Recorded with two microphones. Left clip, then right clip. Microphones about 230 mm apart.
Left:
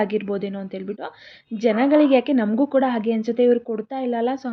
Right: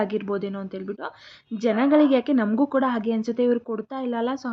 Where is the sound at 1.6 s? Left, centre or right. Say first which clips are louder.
Left 2 dB; centre.